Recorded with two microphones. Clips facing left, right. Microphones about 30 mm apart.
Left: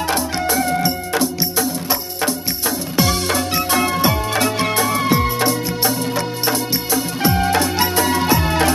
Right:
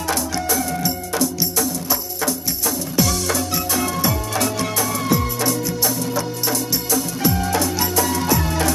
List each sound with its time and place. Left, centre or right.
0.0 s music: left